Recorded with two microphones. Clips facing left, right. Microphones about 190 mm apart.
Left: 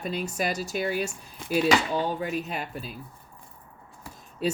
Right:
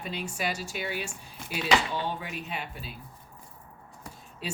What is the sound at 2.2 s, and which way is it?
Speech, 45° left (ahead or behind).